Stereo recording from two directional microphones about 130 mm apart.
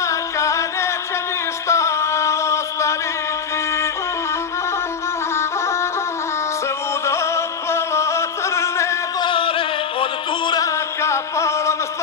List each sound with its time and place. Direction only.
0.0 s music: 25° left (ahead or behind)
5.3 s music: 20° left (ahead or behind)
7.1 s music: 20° left (ahead or behind)
9.2 s music: 40° left (ahead or behind)
11.0 s music: 20° left (ahead or behind)